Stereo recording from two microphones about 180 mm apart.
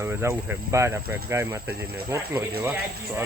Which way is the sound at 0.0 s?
15° right (ahead or behind).